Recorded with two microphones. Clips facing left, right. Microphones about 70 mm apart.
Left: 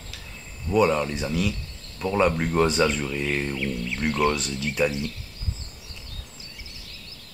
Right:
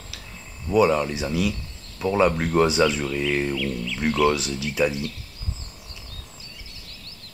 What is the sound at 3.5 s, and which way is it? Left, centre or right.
Speech, left.